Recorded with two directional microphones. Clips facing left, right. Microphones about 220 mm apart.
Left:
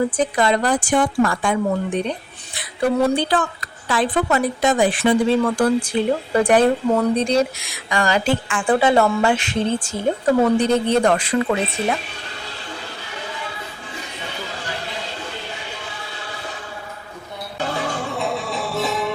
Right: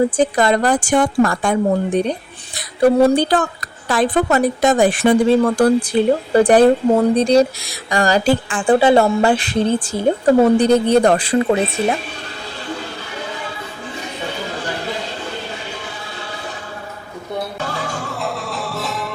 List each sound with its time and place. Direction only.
0.2 s a woman's voice: 45° right (ahead or behind); by 11.9 s 30° right (ahead or behind)
18.1 s music: centre (ahead or behind)